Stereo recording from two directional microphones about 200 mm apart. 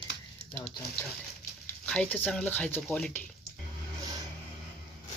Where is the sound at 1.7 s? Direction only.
5° left (ahead or behind).